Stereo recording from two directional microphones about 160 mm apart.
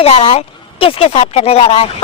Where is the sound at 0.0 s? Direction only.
40° left (ahead or behind).